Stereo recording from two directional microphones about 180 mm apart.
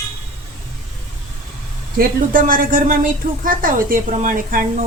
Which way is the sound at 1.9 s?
50° right (ahead or behind).